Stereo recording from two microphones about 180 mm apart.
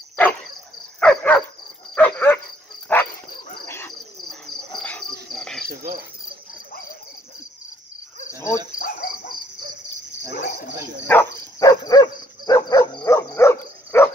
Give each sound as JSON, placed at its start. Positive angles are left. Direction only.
{"t": 0.1, "sound": "cricket", "side_deg": 10}
{"t": 0.9, "sound": "dog", "side_deg": 5}
{"t": 3.6, "sound": "cricket", "side_deg": 15}
{"t": 4.7, "sound": "insect", "side_deg": 5}
{"t": 8.4, "sound": "cricket", "side_deg": 15}
{"t": 8.7, "sound": "cricket", "side_deg": 45}
{"t": 11.1, "sound": "dog", "side_deg": 15}